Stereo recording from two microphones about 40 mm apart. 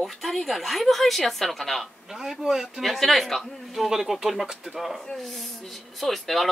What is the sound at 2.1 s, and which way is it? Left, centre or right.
Speech, centre.